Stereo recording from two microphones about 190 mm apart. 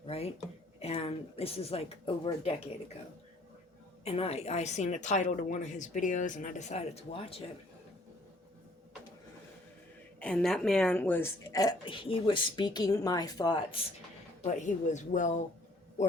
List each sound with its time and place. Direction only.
0.0 s a sound: 30° left (ahead or behind)
0.8 s a woman's voice: 30° left (ahead or behind)
4.0 s a woman's voice: 30° left (ahead or behind)
10.2 s a woman's voice: 5° left (ahead or behind); by 13.8 s 25° left (ahead or behind)
14.4 s a woman's voice: 40° left (ahead or behind)